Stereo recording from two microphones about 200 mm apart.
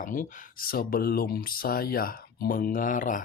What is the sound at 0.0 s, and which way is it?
Speech, 40° left (ahead or behind).